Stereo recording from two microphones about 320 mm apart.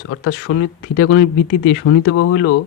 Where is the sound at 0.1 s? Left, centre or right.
Left.